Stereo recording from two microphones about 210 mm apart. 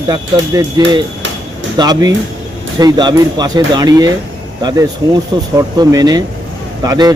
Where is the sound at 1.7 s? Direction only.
20° right (ahead or behind).